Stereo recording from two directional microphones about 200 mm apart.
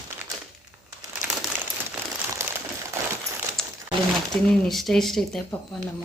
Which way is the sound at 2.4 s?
15° right (ahead or behind).